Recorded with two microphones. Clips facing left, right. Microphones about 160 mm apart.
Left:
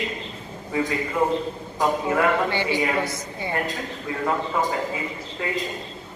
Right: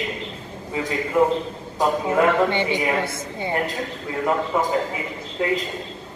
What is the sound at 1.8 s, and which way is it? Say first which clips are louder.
A woman's voice: right 2 dB; 20° right (ahead or behind).